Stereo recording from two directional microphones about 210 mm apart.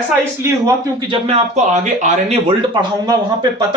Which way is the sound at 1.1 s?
30° right (ahead or behind).